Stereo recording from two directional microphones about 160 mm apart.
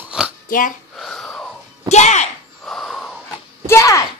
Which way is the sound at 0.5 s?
60° left (ahead or behind).